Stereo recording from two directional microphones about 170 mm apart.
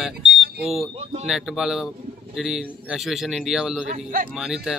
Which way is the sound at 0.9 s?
40° right (ahead or behind).